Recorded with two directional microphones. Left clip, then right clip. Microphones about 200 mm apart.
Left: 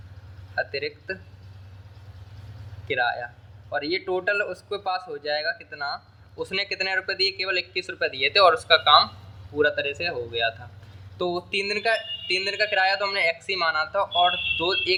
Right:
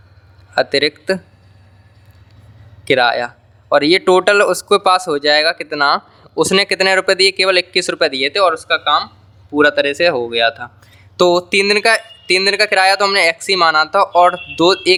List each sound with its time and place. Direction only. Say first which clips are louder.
0.5 s speech: right 14 dB; 40° right (ahead or behind)
2.8 s speech: right 12 dB; 40° right (ahead or behind)
9.6 s speech: right 11 dB; 50° right (ahead or behind)